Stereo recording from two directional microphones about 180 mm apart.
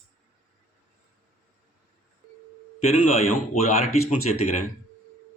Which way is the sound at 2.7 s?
35° left (ahead or behind).